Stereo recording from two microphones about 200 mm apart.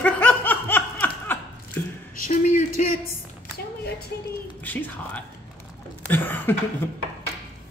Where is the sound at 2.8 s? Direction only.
40° left (ahead or behind).